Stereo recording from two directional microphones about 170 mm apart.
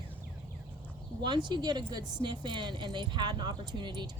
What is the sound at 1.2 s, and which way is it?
Speech, 25° right (ahead or behind).